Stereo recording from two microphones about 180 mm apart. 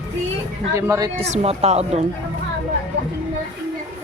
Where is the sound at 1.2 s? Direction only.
35° right (ahead or behind).